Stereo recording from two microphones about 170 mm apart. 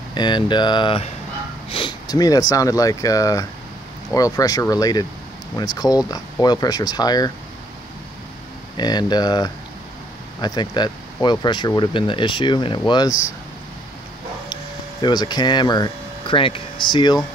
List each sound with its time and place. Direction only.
0.1 s speech: 25° left (ahead or behind)
8.7 s speech: 25° left (ahead or behind)
15.0 s speech: 25° left (ahead or behind)